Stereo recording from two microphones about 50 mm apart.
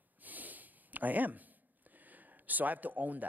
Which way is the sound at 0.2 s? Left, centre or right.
Right.